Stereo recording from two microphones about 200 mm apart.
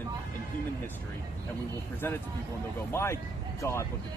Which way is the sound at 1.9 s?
10° left (ahead or behind).